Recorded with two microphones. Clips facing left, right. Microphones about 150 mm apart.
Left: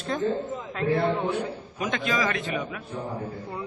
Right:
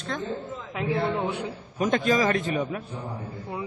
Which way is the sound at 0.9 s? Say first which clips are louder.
Left 2 dB; 15° right (ahead or behind).